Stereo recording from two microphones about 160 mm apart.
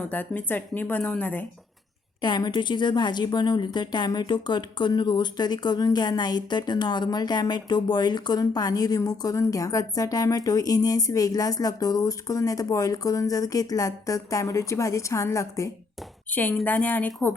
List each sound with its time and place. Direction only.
0.1 s a woman's voice: 10° left (ahead or behind)
2.2 s a woman's voice: 25° left (ahead or behind); by 17.3 s 10° left (ahead or behind)